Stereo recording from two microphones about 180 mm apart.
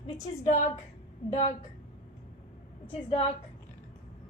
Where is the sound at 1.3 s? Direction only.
35° left (ahead or behind).